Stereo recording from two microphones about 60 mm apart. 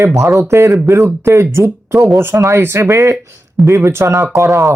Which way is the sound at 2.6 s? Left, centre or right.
Right.